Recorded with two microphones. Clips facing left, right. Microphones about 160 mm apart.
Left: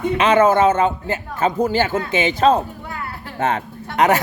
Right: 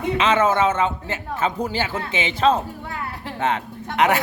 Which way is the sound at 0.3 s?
40° left (ahead or behind).